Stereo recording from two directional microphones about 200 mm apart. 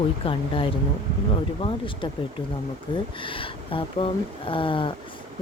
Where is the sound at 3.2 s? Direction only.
25° left (ahead or behind).